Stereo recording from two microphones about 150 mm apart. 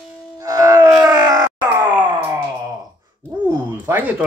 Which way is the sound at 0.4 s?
25° right (ahead or behind).